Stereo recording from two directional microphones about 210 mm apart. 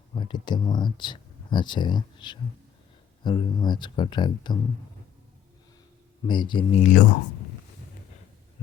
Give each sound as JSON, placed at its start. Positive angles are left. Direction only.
{"t": 0.2, "sound": "speech", "side_deg": 20}
{"t": 6.2, "sound": "speech", "side_deg": 20}
{"t": 6.7, "sound": "speech", "side_deg": 40}